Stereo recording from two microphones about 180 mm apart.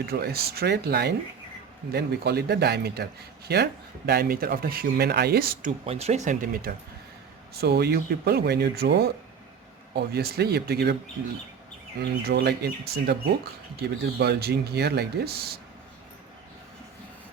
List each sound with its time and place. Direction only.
0.1 s speech: 60° right (ahead or behind)
5.8 s speech: 35° right (ahead or behind); by 6.7 s 55° right (ahead or behind)
7.6 s speech: 65° right (ahead or behind)
11.9 s speech: 65° right (ahead or behind)